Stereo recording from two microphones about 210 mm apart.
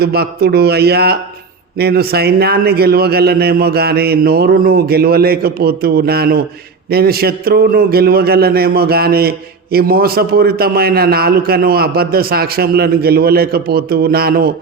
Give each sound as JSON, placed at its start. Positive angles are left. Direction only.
{"t": 0.0, "sound": "a man's voice", "side_deg": -50}